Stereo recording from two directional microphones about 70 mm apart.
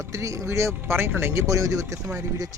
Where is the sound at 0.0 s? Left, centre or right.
Right.